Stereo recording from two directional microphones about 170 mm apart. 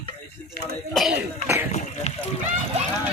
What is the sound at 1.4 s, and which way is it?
Speech, 15° right (ahead or behind).